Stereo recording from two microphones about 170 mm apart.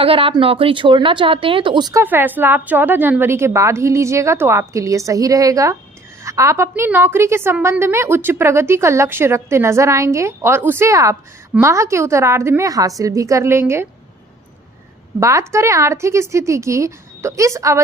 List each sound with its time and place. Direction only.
0.0 s a woman's voice: 35° right (ahead or behind); by 13.8 s 15° right (ahead or behind)
15.2 s a woman's voice: 15° right (ahead or behind)